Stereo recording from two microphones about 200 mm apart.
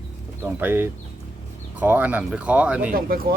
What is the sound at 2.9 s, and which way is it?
Speech, 45° right (ahead or behind).